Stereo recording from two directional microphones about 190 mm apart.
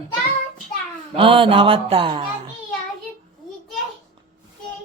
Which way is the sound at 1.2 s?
25° right (ahead or behind).